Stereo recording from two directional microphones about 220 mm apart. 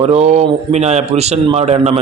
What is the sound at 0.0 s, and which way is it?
A man's voice, 30° right (ahead or behind).